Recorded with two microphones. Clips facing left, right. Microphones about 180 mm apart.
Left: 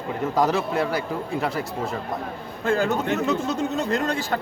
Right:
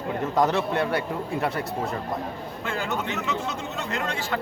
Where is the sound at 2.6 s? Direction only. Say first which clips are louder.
Left 7 dB; 35° left (ahead or behind).